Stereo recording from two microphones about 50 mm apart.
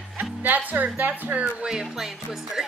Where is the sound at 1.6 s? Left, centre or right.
Centre.